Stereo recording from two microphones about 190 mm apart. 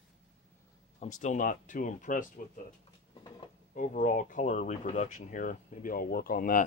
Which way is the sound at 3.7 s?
45° left (ahead or behind).